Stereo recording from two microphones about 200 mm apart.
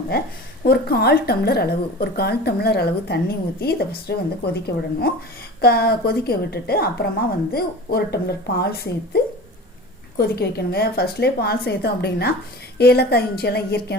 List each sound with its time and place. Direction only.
0.6 s a woman's voice: 50° left (ahead or behind)